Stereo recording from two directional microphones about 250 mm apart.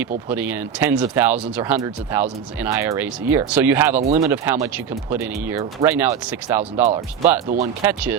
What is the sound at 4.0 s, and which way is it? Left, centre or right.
Speech, right.